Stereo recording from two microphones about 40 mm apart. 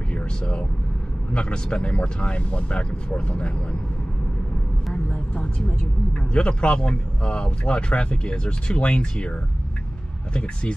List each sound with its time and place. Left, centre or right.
0.1 s vehicle: left
1.3 s speech: left
5.1 s vehicle: left
6.3 s speech: left